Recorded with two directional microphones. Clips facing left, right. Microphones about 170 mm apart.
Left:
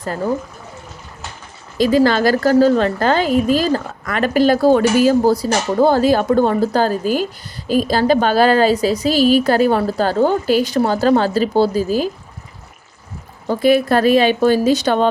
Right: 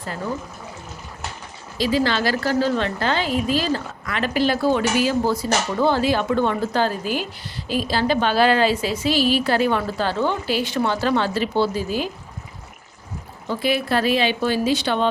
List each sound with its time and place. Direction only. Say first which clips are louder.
1.8 s a woman's voice: left 7 dB; 45° left (ahead or behind)
13.5 s a woman's voice: left 8 dB; 45° left (ahead or behind)